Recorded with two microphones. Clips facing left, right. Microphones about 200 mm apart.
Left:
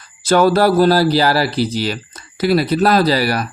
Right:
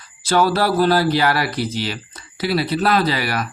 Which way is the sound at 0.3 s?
50° left (ahead or behind).